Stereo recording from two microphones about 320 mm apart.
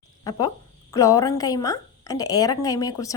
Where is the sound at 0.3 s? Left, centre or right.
Centre.